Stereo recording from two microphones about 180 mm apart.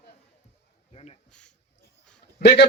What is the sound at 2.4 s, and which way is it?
Speech, 70° left (ahead or behind).